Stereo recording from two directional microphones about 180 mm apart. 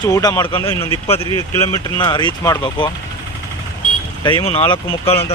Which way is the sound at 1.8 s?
20° left (ahead or behind).